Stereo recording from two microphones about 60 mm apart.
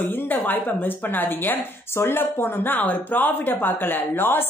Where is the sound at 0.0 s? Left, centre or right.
Left.